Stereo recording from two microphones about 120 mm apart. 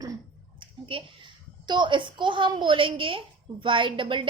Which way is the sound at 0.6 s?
45° right (ahead or behind).